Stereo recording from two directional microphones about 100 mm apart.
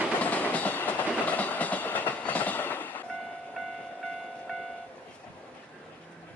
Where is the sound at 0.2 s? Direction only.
15° left (ahead or behind).